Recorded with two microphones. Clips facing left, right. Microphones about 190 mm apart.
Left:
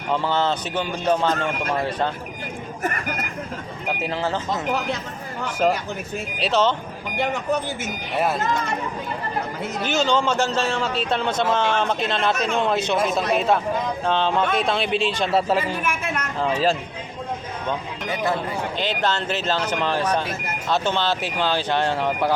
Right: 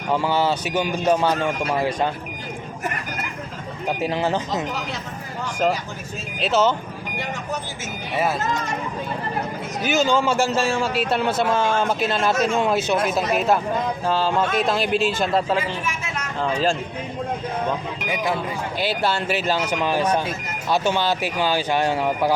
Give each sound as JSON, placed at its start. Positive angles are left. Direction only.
{"t": 0.1, "sound": "a man's voice", "side_deg": -10}
{"t": 4.0, "sound": "a man's voice", "side_deg": -15}
{"t": 6.4, "sound": "a man's voice", "side_deg": -5}
{"t": 8.1, "sound": "a man's voice", "side_deg": -5}
{"t": 9.8, "sound": "a man's voice", "side_deg": -5}
{"t": 15.3, "sound": "speech", "side_deg": 10}
{"t": 15.8, "sound": "a sound", "side_deg": 55}
{"t": 16.4, "sound": "a man's voice", "side_deg": 5}
{"t": 18.8, "sound": "a man's voice", "side_deg": -10}